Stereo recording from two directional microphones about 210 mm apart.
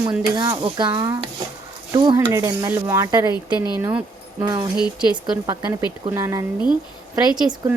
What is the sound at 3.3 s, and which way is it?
Speech, 20° left (ahead or behind).